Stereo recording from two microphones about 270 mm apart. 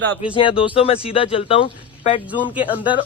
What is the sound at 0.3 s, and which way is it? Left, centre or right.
A man's voice, centre.